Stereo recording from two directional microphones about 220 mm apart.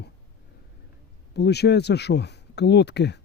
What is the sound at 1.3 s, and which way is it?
Speech, 50° left (ahead or behind).